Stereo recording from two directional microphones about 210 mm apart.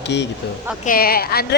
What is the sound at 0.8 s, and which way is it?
Speech, 45° left (ahead or behind).